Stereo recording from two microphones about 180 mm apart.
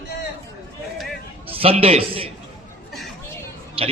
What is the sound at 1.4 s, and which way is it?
Speech, 30° right (ahead or behind).